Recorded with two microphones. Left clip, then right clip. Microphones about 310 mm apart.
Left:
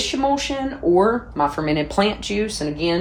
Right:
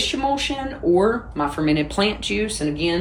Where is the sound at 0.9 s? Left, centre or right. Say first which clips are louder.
Left 3 dB; left.